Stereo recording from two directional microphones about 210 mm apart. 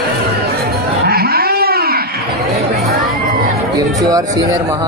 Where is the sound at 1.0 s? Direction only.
45° right (ahead or behind).